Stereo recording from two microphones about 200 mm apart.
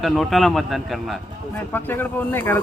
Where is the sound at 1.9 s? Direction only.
10° left (ahead or behind).